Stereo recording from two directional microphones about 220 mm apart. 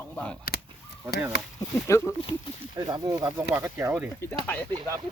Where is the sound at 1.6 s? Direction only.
15° left (ahead or behind).